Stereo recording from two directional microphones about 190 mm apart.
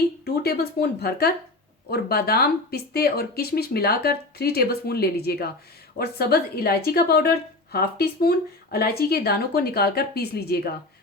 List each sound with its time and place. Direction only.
0.3 s a woman's voice: 55° left (ahead or behind)